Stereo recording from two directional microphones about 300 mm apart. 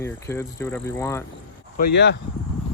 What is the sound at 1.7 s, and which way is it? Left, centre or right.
Speech, left.